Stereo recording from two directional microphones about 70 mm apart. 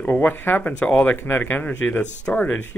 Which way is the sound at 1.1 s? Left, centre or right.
Left.